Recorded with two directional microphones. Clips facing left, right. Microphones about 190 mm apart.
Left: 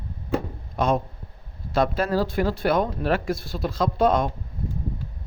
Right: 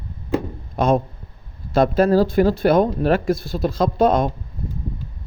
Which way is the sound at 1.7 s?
45° right (ahead or behind).